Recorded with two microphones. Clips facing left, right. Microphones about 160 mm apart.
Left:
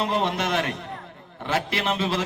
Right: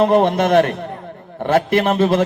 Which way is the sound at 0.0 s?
55° right (ahead or behind).